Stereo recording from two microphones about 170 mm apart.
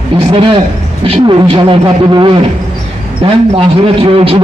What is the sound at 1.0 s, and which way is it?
A man's voice, 30° right (ahead or behind).